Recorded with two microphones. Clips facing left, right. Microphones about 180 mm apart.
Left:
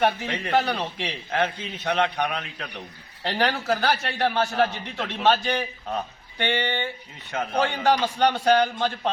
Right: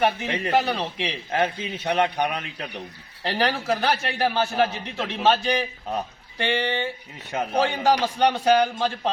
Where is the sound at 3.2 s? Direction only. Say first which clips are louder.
Even; centre (ahead or behind).